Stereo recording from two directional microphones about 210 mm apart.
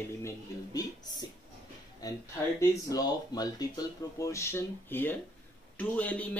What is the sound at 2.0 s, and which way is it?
Speech, 15° left (ahead or behind).